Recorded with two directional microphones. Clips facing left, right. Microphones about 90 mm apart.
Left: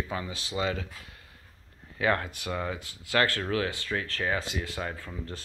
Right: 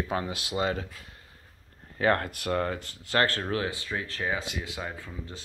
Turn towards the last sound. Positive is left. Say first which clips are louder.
# left 2 dB
turn(degrees=-10)  # may be behind; listen again after turning